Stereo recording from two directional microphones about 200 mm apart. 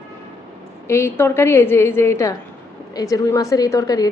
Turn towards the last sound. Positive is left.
turn(degrees=20)  # may be behind; listen again after turning